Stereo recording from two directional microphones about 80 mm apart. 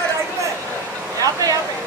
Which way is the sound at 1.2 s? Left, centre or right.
Right.